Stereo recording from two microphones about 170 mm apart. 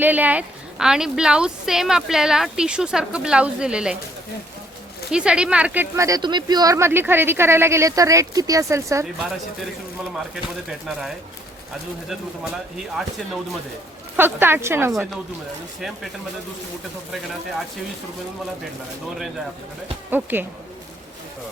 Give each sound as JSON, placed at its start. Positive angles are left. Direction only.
{"t": 0.0, "sound": "a woman's voice", "side_deg": -10}
{"t": 5.1, "sound": "speech", "side_deg": -5}
{"t": 10.2, "sound": "a woman's voice", "side_deg": 0}
{"t": 12.7, "sound": "a woman's voice", "side_deg": 0}
{"t": 14.2, "sound": "speech", "side_deg": -10}
{"t": 20.1, "sound": "speech", "side_deg": -10}